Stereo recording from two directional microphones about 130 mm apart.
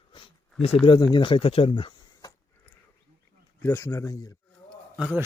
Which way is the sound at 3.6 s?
20° left (ahead or behind).